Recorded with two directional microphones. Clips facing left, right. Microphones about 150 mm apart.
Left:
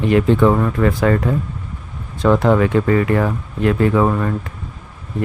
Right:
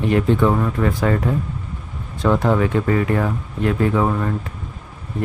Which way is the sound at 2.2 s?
80° left.